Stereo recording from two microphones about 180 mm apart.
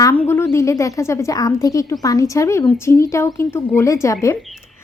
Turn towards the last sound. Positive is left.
turn(degrees=15)  # may be behind; listen again after turning